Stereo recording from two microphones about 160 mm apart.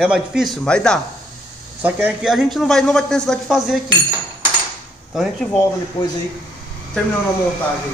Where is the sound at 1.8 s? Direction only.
10° right (ahead or behind).